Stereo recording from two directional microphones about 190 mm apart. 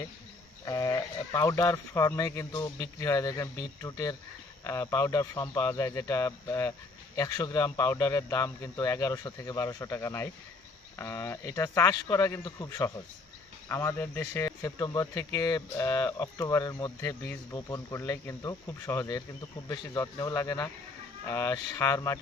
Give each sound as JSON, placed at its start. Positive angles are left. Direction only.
{"t": 0.6, "sound": "speech", "side_deg": 20}